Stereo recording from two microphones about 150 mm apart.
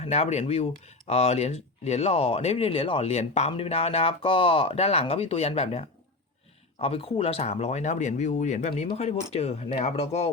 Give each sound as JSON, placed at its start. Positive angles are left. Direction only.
{"t": 0.0, "sound": "speech", "side_deg": 45}